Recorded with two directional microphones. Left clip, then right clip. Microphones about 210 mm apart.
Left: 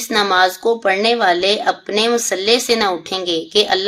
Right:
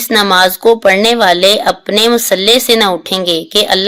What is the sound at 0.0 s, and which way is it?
A woman's voice, 35° right (ahead or behind).